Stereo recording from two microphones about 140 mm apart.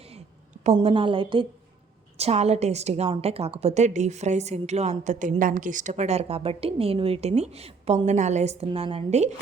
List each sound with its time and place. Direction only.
0.6 s a woman's voice: 45° right (ahead or behind)
2.1 s a woman's voice: 50° right (ahead or behind)